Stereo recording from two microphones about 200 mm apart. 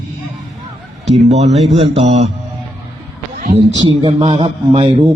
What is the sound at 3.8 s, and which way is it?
A man's voice, 25° right (ahead or behind).